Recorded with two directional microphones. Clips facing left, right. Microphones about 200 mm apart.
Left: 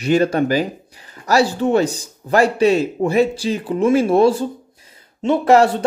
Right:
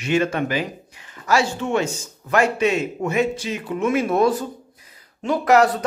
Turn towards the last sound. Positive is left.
turn(degrees=30)  # may be behind; listen again after turning